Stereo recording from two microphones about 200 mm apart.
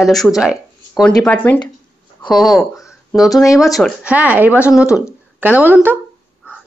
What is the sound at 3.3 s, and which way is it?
Speech, 15° left (ahead or behind).